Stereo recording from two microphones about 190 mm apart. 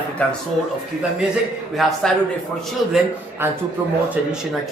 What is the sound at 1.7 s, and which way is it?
Speech, centre (ahead or behind).